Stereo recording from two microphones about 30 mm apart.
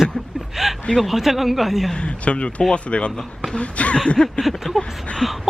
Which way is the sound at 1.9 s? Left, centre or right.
Left.